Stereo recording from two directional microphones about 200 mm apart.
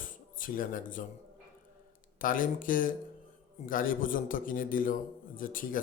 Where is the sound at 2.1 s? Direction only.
45° left (ahead or behind).